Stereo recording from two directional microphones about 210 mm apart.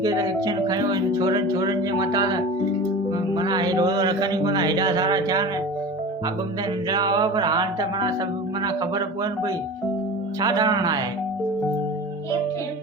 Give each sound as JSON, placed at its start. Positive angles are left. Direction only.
{"t": 0.0, "sound": "speech", "side_deg": -15}
{"t": 6.9, "sound": "music", "side_deg": -20}
{"t": 8.6, "sound": "speech", "side_deg": -15}